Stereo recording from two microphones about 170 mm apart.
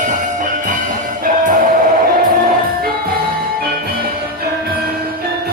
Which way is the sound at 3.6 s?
60° right (ahead or behind).